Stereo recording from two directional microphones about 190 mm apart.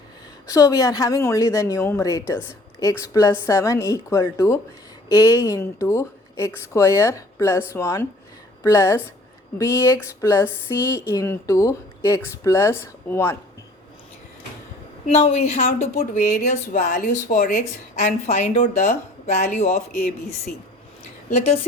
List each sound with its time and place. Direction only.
0.4 s speech: 20° left (ahead or behind)
15.0 s a woman's voice: 35° left (ahead or behind)